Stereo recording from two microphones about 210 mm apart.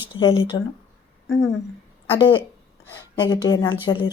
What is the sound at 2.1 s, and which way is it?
Speech, 25° left (ahead or behind).